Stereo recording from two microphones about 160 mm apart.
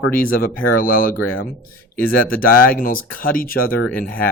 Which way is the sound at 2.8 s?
60° left (ahead or behind).